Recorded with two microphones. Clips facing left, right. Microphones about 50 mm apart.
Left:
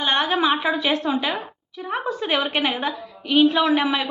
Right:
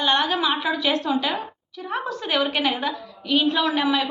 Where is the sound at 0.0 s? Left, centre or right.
Centre.